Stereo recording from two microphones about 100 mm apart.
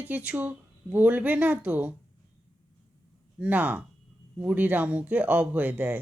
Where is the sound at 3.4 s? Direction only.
15° right (ahead or behind).